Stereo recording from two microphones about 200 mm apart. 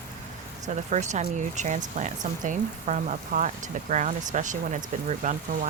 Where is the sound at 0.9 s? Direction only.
35° right (ahead or behind).